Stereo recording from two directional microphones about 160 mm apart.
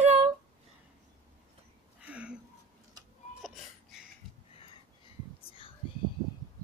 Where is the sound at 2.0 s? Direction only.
5° right (ahead or behind).